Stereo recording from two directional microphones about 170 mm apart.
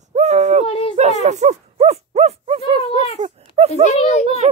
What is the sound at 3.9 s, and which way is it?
Speech, 40° left (ahead or behind).